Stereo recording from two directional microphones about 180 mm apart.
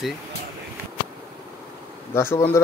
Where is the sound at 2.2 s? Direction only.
15° left (ahead or behind).